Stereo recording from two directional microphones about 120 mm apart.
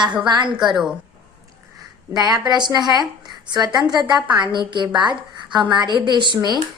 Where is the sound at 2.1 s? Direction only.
35° right (ahead or behind).